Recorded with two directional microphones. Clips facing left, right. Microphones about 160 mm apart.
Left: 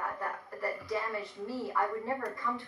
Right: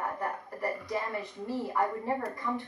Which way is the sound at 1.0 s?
20° right (ahead or behind).